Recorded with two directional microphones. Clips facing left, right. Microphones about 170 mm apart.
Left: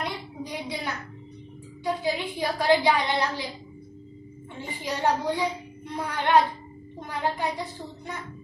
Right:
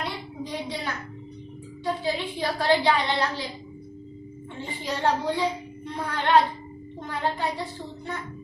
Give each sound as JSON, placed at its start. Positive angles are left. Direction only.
{"t": 0.0, "sound": "a sound", "side_deg": 15}
{"t": 2.0, "sound": "a woman's voice", "side_deg": 10}
{"t": 4.6, "sound": "a woman's voice", "side_deg": 15}